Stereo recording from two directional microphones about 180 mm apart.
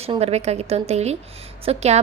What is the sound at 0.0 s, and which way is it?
A woman's voice, 35° right (ahead or behind).